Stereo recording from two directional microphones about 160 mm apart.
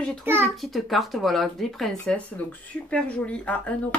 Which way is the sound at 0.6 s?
Centre (ahead or behind).